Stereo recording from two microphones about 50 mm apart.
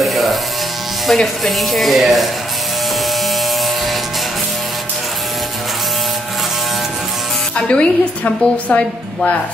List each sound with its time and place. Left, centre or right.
0.0 s electric shaver: centre
1.0 s speech: centre
7.5 s a woman's voice: left